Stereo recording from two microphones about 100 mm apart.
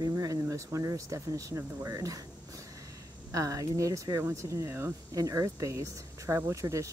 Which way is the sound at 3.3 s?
35° right (ahead or behind).